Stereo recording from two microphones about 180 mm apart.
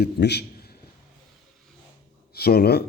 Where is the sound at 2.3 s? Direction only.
60° left (ahead or behind).